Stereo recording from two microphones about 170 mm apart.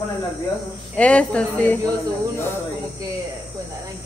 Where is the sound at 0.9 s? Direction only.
5° left (ahead or behind).